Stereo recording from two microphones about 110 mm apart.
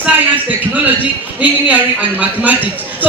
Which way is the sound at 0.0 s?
15° right (ahead or behind).